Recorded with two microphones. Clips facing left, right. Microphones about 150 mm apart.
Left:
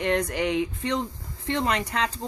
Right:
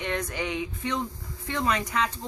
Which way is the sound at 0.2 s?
70° left (ahead or behind).